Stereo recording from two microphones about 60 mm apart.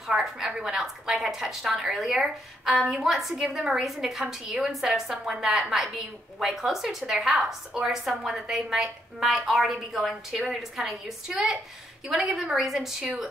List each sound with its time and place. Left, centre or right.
0.1 s a woman's voice: centre